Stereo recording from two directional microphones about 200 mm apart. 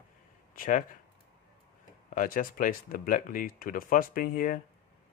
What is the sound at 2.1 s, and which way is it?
Speech, 45° left (ahead or behind).